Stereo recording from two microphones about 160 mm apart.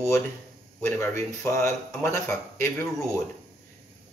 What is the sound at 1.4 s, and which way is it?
Speech, 20° left (ahead or behind).